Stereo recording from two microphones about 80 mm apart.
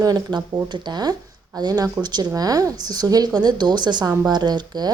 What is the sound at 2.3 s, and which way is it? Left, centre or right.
A woman's voice, right.